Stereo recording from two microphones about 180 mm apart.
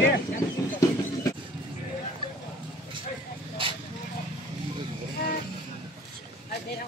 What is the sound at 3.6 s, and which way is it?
Vehicle, 30° right (ahead or behind).